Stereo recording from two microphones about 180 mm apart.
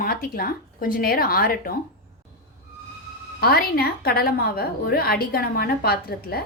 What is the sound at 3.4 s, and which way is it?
A woman's voice, 60° left (ahead or behind).